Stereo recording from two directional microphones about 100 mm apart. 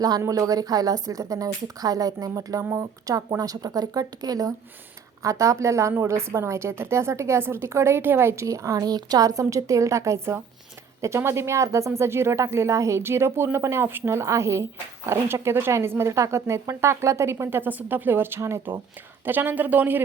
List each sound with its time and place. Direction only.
0.2 s speech: 35° right (ahead or behind); by 20.0 s 15° right (ahead or behind)